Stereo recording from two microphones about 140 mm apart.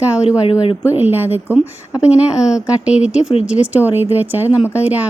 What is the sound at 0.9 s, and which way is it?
Speech, 15° right (ahead or behind).